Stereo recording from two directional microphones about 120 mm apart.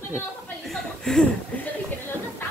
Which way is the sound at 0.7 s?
5° left (ahead or behind).